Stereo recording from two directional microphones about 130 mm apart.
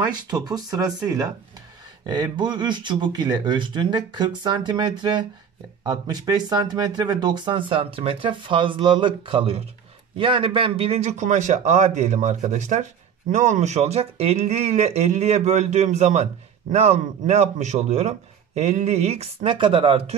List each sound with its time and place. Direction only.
0.0 s a man's voice: 30° right (ahead or behind)